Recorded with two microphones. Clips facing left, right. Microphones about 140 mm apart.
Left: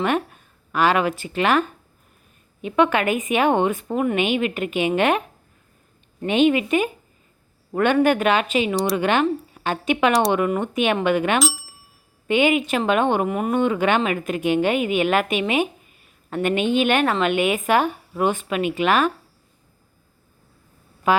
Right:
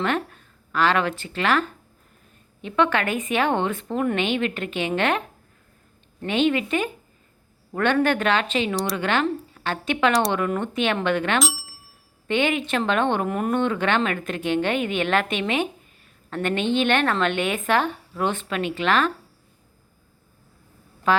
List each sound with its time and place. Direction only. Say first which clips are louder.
0.0 s a woman's voice: left 3 dB; 15° left (ahead or behind)
11.3 s speech: left 2 dB; centre (ahead or behind)
12.3 s a woman's voice: left 4 dB; 10° left (ahead or behind)
21.1 s a woman's voice: left 2 dB; 10° left (ahead or behind)